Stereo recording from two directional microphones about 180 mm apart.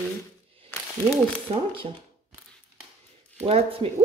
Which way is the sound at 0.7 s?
10° left (ahead or behind).